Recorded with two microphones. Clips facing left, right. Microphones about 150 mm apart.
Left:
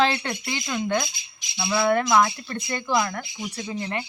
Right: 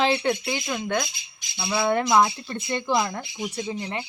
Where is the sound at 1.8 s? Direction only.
25° right (ahead or behind).